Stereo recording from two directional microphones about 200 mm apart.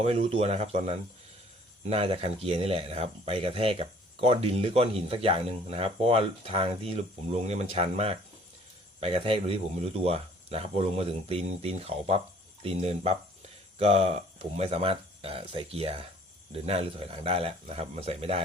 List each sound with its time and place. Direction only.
0.0 s speech: 30° right (ahead or behind)